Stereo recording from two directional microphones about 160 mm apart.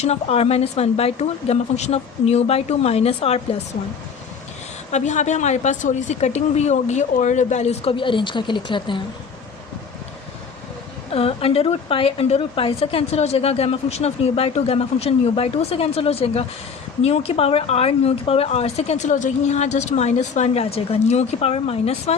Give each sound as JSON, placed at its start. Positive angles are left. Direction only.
{"t": 0.0, "sound": "a woman's voice", "side_deg": 40}
{"t": 4.9, "sound": "speech", "side_deg": 45}
{"t": 11.1, "sound": "a woman's voice", "side_deg": 35}